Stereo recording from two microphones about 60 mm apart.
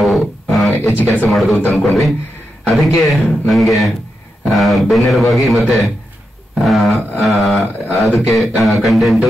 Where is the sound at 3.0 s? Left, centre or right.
Centre.